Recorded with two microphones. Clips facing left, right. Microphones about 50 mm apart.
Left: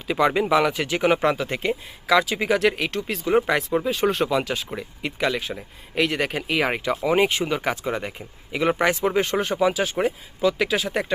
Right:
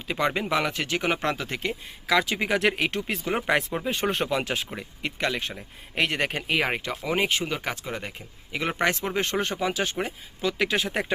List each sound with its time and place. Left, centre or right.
0.1 s speech: centre
7.0 s speech: centre
8.8 s speech: centre